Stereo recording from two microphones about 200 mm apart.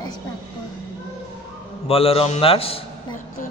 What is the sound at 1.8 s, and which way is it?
Speech, 30° left (ahead or behind).